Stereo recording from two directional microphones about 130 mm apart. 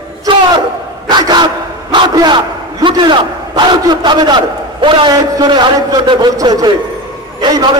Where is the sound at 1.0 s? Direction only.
35° right (ahead or behind).